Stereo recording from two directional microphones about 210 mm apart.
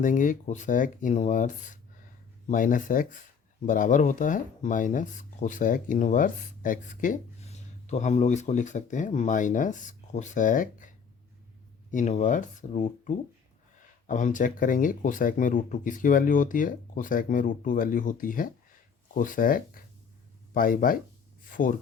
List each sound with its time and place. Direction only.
0.0 s speech: 40° left (ahead or behind)